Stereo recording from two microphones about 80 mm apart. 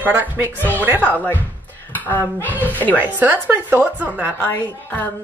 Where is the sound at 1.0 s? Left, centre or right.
Left.